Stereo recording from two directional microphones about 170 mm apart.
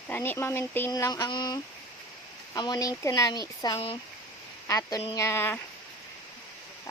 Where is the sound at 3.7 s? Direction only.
35° left (ahead or behind).